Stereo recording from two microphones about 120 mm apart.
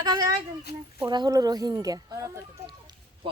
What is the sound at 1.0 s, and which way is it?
Speech, 35° right (ahead or behind).